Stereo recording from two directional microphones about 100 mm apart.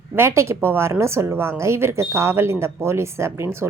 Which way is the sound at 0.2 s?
30° right (ahead or behind).